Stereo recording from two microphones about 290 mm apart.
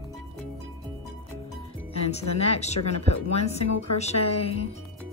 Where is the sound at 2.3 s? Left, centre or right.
Left.